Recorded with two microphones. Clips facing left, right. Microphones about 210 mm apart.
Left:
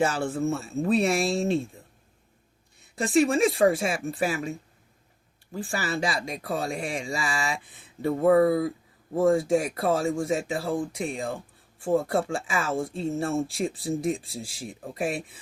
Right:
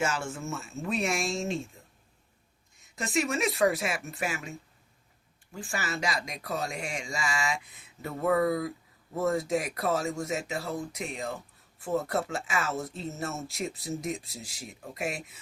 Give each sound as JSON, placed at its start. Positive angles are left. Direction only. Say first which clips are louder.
{"t": 0.0, "sound": "speech", "louder": "left 7 dB", "side_deg": 35}
{"t": 5.5, "sound": "speech", "louder": "left 5 dB", "side_deg": 35}